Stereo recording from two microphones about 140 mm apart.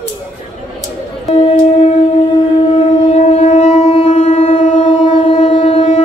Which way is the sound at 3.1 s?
55° left (ahead or behind).